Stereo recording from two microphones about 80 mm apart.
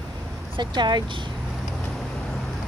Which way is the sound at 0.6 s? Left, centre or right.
Right.